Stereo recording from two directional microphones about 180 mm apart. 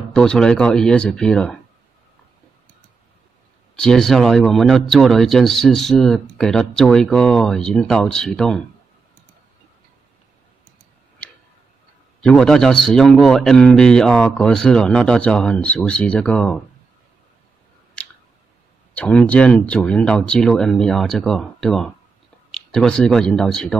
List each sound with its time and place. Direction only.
0.1 s speech: 5° left (ahead or behind)
3.7 s speech: 5° left (ahead or behind)
11.2 s tick-tock: 5° left (ahead or behind)
12.2 s speech: 5° left (ahead or behind)
18.0 s squish: 5° left (ahead or behind)
18.9 s speech: 5° left (ahead or behind)